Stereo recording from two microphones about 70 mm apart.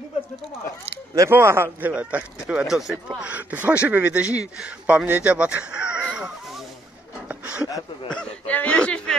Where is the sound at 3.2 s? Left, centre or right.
Right.